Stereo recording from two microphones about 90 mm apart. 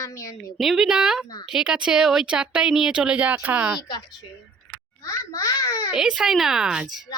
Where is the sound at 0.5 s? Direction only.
Centre (ahead or behind); by 3.8 s 15° right (ahead or behind).